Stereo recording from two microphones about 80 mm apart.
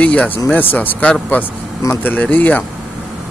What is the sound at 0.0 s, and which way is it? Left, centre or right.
Speech, centre.